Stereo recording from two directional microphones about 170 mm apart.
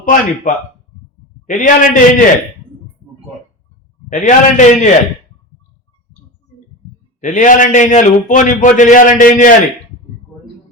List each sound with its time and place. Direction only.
0.0 s a man's voice: 50° left (ahead or behind)
4.1 s a man's voice: 45° left (ahead or behind)
7.2 s a man's voice: 50° left (ahead or behind)